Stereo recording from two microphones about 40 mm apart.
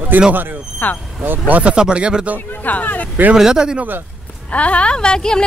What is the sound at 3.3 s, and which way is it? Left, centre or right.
Speech, centre.